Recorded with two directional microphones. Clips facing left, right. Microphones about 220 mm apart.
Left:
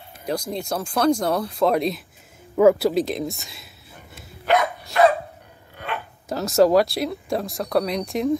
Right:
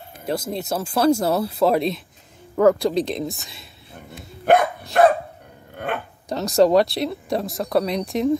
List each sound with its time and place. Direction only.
0.2 s speech: 5° right (ahead or behind)
4.5 s dog: 50° right (ahead or behind)
6.2 s speech: centre (ahead or behind)